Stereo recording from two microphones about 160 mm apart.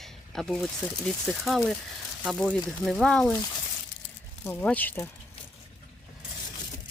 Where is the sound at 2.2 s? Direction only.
Centre (ahead or behind).